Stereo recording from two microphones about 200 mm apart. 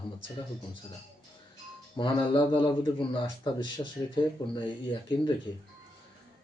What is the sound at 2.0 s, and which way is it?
A man's voice, 25° left (ahead or behind).